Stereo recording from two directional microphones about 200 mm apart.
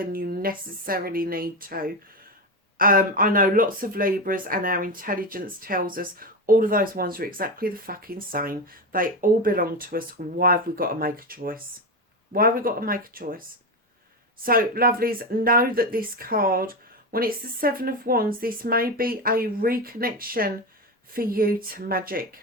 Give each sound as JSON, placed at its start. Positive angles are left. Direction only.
{"t": 0.0, "sound": "speech", "side_deg": -45}
{"t": 14.4, "sound": "speech", "side_deg": -45}